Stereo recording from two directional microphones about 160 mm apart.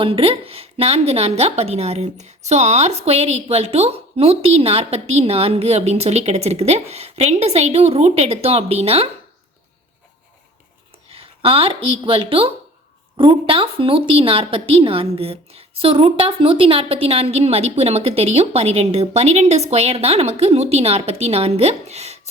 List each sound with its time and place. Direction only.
0.0 s a woman's voice: 35° right (ahead or behind)
11.1 s a woman's voice: 35° right (ahead or behind)